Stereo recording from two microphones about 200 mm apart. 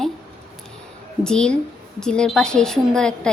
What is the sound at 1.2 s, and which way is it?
A woman's voice, 5° left (ahead or behind).